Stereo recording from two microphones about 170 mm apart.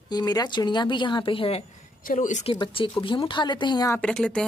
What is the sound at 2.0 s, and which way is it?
Speech, 45° left (ahead or behind).